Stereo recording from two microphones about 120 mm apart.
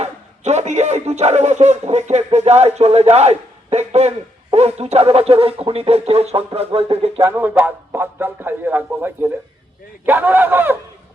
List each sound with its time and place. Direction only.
0.0 s speech: 70° right (ahead or behind)
7.2 s speech: 15° right (ahead or behind)